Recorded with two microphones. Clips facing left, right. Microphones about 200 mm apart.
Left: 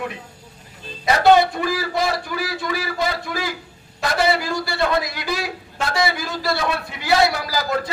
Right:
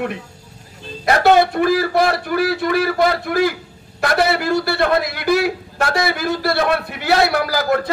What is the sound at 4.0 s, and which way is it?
A man's voice, 60° right (ahead or behind).